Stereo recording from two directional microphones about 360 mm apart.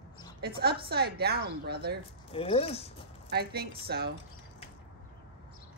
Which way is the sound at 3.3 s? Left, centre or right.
Right.